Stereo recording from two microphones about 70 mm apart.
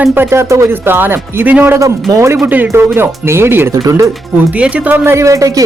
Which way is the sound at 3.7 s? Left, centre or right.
Right.